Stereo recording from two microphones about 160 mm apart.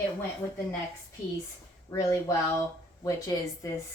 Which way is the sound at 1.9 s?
20° left (ahead or behind).